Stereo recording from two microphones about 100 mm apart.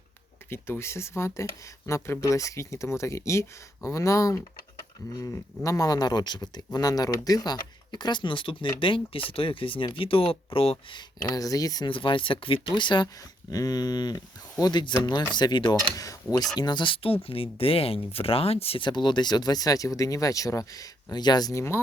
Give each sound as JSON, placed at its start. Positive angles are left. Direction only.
{"t": 0.5, "sound": "speech", "side_deg": 25}
{"t": 11.3, "sound": "speech", "side_deg": 35}
{"t": 11.9, "sound": "speech", "side_deg": 60}
{"t": 12.6, "sound": "speech", "side_deg": 50}
{"t": 13.5, "sound": "speech", "side_deg": 40}
{"t": 15.7, "sound": "speech", "side_deg": 35}
{"t": 16.6, "sound": "speech", "side_deg": 50}
{"t": 18.8, "sound": "speech", "side_deg": 50}